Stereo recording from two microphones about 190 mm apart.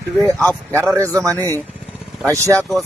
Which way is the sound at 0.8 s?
15° right (ahead or behind).